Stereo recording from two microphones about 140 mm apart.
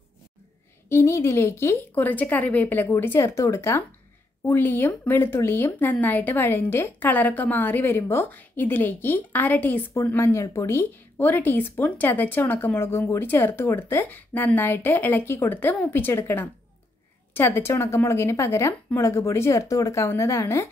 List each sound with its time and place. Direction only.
0.8 s speech: 20° left (ahead or behind)